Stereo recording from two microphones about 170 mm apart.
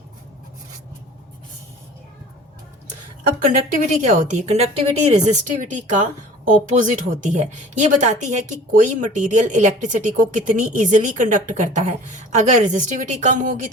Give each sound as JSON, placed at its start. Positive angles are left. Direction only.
{"t": 4.0, "sound": "a woman's voice", "side_deg": -45}